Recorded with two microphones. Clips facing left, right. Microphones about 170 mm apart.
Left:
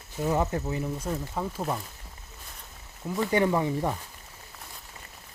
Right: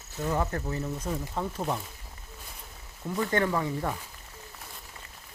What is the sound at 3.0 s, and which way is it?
Speech, 5° left (ahead or behind).